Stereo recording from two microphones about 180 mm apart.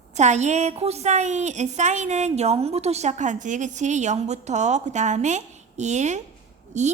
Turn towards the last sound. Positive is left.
turn(degrees=-40)  # may be behind; listen again after turning